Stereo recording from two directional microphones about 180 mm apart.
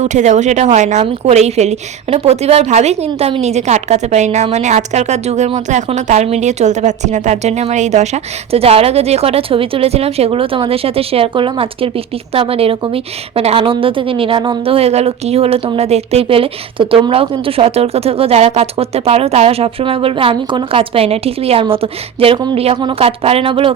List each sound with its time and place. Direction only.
0.0 s a woman's voice: 40° right (ahead or behind)